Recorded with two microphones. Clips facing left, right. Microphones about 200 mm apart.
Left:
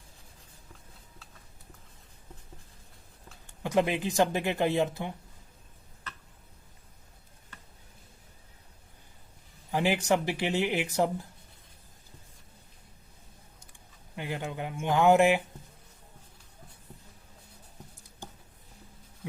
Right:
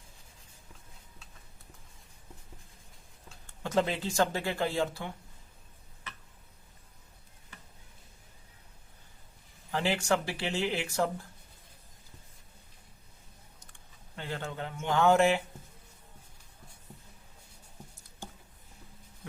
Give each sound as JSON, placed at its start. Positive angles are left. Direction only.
{"t": 3.6, "sound": "speech", "side_deg": 15}
{"t": 9.7, "sound": "speech", "side_deg": 15}
{"t": 14.2, "sound": "speech", "side_deg": 15}